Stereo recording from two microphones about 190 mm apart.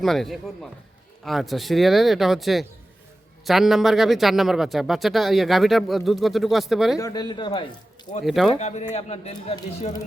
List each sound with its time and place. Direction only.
0.0 s speech: centre (ahead or behind)
6.9 s speech: 20° left (ahead or behind)
8.2 s speech: centre (ahead or behind)
8.5 s speech: 35° left (ahead or behind)